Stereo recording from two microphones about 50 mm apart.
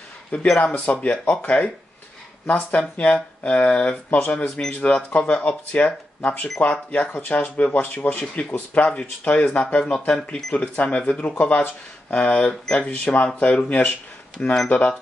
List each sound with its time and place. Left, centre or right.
0.3 s speech: left
2.4 s speech: left
2.8 s speech: left
9.2 s speech: left